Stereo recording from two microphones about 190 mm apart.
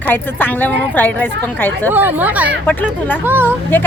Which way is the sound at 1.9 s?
10° right (ahead or behind).